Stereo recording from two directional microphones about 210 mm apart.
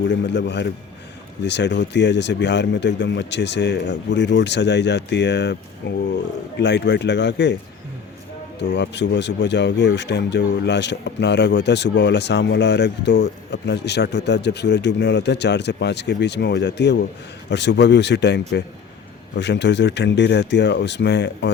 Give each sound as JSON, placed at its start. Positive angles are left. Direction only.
{"t": 0.1, "sound": "speech", "side_deg": 55}
{"t": 8.5, "sound": "speech", "side_deg": 55}